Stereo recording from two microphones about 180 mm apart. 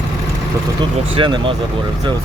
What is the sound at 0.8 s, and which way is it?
Speech, 25° right (ahead or behind).